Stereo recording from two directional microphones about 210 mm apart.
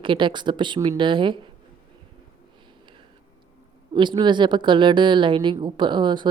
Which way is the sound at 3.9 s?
20° right (ahead or behind).